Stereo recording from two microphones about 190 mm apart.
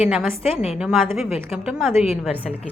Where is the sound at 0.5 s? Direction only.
30° left (ahead or behind).